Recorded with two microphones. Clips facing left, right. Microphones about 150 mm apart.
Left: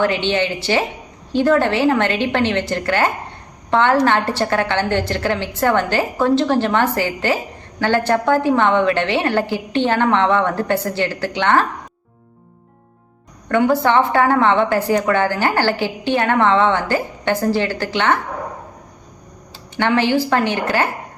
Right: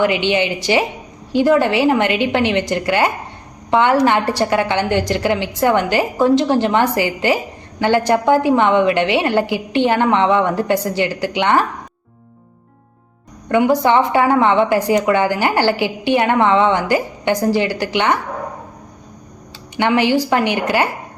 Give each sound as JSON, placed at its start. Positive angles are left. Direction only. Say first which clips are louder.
{"t": 0.0, "sound": "a woman's voice", "louder": "right 2 dB", "side_deg": -15}
{"t": 13.5, "sound": "a woman's voice", "louder": "right 2 dB", "side_deg": -15}
{"t": 19.7, "sound": "a woman's voice", "louder": "right 1 dB", "side_deg": -15}